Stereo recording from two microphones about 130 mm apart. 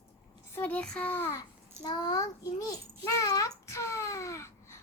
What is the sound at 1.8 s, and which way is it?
A child's voice, 30° left (ahead or behind).